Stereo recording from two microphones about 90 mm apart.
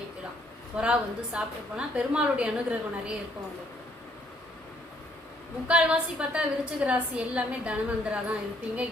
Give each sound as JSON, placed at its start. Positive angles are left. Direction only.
{"t": 0.8, "sound": "a woman's voice", "side_deg": -10}
{"t": 5.6, "sound": "a woman's voice", "side_deg": -15}